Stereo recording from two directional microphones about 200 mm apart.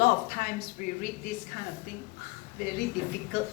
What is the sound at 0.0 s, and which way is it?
Speech, 45° left (ahead or behind).